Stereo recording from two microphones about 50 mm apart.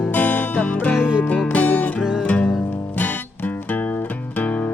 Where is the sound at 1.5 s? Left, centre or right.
Left.